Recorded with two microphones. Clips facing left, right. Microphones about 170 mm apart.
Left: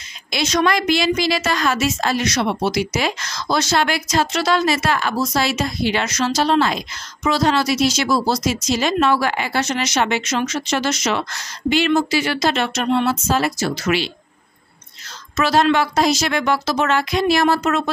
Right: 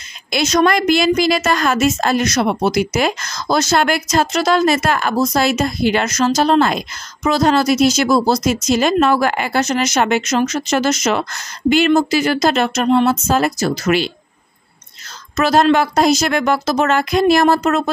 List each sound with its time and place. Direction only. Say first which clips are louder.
0.3 s speech: right 4 dB; 45° right (ahead or behind)
15.3 s speech: right 3 dB; 40° right (ahead or behind)